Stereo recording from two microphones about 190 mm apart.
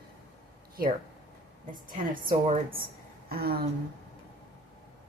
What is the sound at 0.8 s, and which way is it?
A woman's voice, 55° right (ahead or behind).